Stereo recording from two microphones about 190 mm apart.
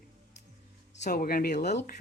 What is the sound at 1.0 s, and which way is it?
Speech, 50° left (ahead or behind).